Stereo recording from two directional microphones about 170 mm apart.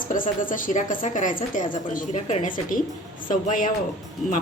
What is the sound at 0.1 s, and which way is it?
A woman's voice, 50° left (ahead or behind).